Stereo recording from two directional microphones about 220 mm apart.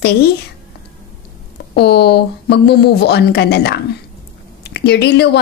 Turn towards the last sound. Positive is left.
turn(degrees=50)  # may be behind; listen again after turning